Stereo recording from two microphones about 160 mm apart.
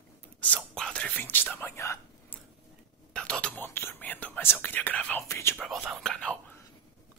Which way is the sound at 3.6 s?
15° left (ahead or behind).